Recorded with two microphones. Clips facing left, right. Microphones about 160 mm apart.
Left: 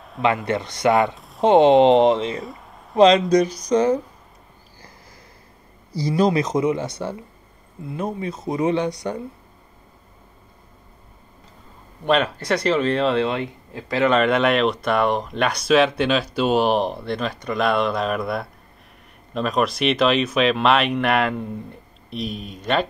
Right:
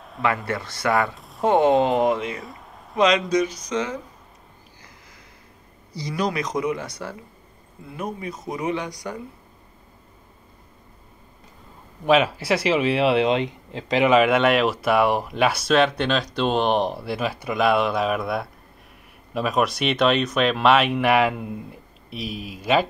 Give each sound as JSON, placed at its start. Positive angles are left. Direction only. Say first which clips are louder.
{"t": 0.2, "sound": "speech", "louder": "left 4 dB", "side_deg": 20}
{"t": 1.1, "sound": "a sound", "louder": "left 1 dB", "side_deg": 0}
{"t": 1.4, "sound": "speech", "louder": "left 5 dB", "side_deg": 20}
{"t": 2.4, "sound": "a sound", "louder": "left 4 dB", "side_deg": 0}
{"t": 3.0, "sound": "speech", "louder": "left 5 dB", "side_deg": 30}
{"t": 5.9, "sound": "speech", "louder": "left 7 dB", "side_deg": 30}
{"t": 12.0, "sound": "speech", "louder": "right 1 dB", "side_deg": -5}